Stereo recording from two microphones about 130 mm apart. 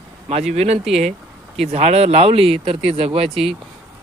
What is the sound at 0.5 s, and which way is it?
Speech, 55° right (ahead or behind).